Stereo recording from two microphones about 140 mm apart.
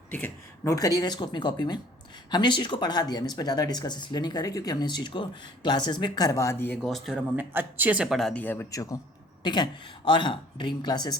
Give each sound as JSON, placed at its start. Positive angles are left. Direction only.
{"t": 0.1, "sound": "speech", "side_deg": 15}
{"t": 6.8, "sound": "speech", "side_deg": 0}
{"t": 7.5, "sound": "speech", "side_deg": -15}
{"t": 8.4, "sound": "speech", "side_deg": 15}